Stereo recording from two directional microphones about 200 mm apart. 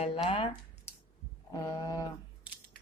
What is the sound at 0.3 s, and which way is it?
Speech, 25° left (ahead or behind).